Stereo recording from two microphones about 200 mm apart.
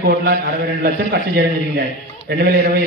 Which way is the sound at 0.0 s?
50° right (ahead or behind).